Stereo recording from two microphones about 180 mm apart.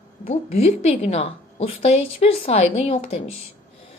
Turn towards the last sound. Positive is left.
turn(degrees=35)  # may be behind; listen again after turning